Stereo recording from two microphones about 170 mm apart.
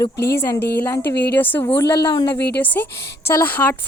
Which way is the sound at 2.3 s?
75° left (ahead or behind).